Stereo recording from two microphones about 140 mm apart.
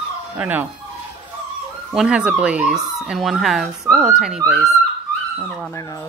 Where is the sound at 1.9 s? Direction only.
5° right (ahead or behind).